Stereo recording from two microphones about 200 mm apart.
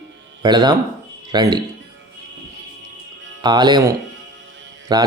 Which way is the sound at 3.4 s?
20° right (ahead or behind).